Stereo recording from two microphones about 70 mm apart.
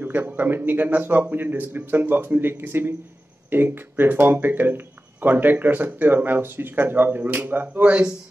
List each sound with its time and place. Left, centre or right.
0.0 s speech: right